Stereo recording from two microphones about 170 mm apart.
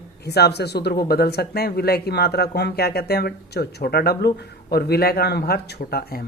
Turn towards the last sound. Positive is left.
turn(degrees=65)  # may be behind; listen again after turning